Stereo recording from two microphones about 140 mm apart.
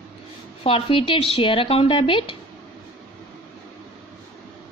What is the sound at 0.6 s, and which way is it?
Speech, 40° left (ahead or behind).